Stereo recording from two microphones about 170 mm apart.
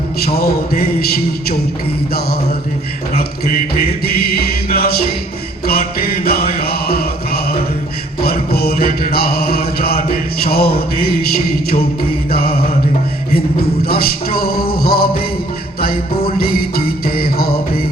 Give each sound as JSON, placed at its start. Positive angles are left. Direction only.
{"t": 0.2, "sound": "mantra", "side_deg": 65}
{"t": 3.2, "sound": "mantra", "side_deg": 65}
{"t": 8.5, "sound": "mantra", "side_deg": 65}
{"t": 12.3, "sound": "music", "side_deg": 65}
{"t": 13.8, "sound": "music", "side_deg": 60}